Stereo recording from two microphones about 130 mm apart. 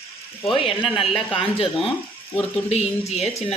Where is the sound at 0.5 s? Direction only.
45° left (ahead or behind).